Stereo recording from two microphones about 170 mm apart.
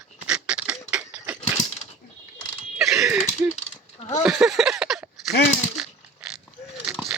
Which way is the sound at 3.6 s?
40° left (ahead or behind).